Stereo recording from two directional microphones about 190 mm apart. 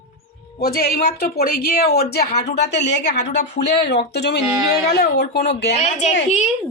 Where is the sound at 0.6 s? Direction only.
55° left (ahead or behind).